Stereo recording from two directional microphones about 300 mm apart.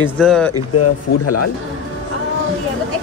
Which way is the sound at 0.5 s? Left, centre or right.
Left.